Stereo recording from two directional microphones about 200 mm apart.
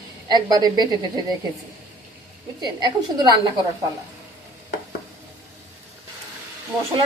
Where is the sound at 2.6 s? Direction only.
20° right (ahead or behind).